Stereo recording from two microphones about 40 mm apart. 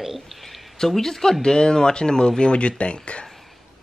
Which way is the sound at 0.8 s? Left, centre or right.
Centre.